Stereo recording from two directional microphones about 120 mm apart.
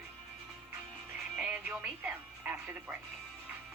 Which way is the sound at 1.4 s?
10° right (ahead or behind).